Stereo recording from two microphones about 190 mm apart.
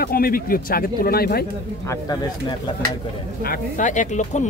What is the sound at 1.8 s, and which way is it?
Speech, 20° left (ahead or behind).